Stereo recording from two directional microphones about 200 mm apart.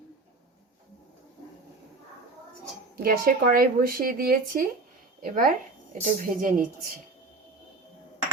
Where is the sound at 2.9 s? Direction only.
45° right (ahead or behind).